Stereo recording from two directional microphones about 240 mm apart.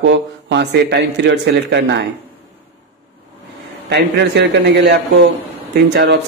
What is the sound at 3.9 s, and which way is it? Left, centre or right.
Speech, right.